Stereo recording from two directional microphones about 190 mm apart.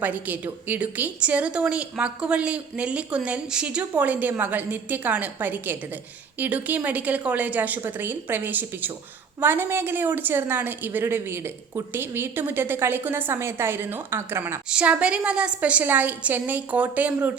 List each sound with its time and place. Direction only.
0.0 s a woman's voice: 10° right (ahead or behind)